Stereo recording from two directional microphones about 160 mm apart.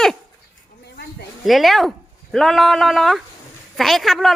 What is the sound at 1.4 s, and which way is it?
A woman's voice, centre (ahead or behind).